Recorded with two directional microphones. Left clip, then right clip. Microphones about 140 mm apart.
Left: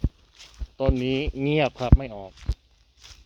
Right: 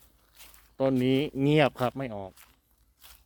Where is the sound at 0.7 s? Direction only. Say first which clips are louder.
Even; 35° right (ahead or behind).